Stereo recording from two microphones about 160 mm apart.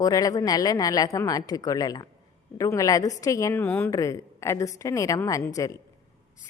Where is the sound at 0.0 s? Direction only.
25° left (ahead or behind).